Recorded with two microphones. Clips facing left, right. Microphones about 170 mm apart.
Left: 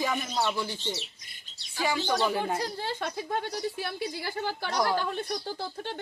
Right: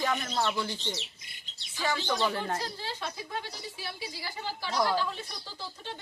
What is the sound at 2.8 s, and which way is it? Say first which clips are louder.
A woman's voice: left 5 dB; 55° left (ahead or behind).